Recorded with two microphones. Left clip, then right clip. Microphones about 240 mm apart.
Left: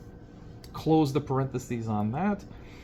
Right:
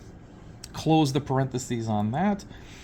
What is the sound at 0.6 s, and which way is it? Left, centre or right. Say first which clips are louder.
Speech: right 2 dB; right.